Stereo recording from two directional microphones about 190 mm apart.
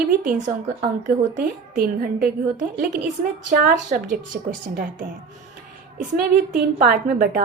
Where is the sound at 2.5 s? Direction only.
55° right (ahead or behind).